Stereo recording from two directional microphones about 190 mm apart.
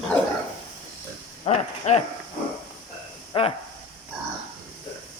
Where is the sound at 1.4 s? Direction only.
35° left (ahead or behind).